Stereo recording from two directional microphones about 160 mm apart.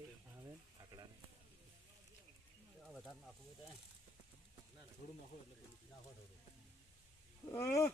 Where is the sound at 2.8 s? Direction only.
Centre (ahead or behind).